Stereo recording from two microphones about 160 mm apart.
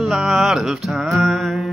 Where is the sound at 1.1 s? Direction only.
Centre (ahead or behind).